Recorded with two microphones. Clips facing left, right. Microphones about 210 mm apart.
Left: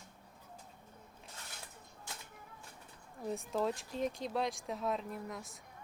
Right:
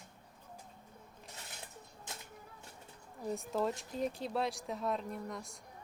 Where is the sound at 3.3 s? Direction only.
Centre (ahead or behind).